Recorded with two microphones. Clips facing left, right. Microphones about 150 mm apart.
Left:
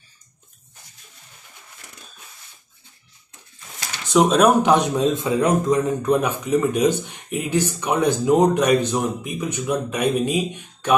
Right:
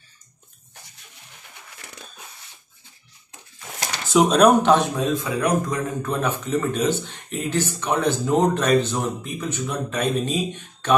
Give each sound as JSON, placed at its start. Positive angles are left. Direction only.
{"t": 4.1, "sound": "speech", "side_deg": 0}
{"t": 4.6, "sound": "a man's voice", "side_deg": 20}